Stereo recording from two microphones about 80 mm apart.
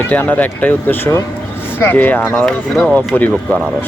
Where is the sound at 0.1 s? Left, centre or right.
Left.